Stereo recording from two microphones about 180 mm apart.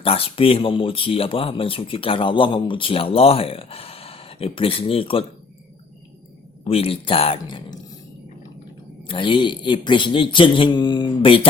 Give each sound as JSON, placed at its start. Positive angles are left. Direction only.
{"t": 0.0, "sound": "speech", "side_deg": 30}
{"t": 6.7, "sound": "speech", "side_deg": 30}
{"t": 9.0, "sound": "speech", "side_deg": 25}